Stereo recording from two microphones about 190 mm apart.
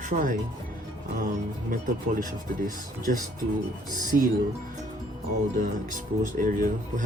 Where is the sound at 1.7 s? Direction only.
45° right (ahead or behind).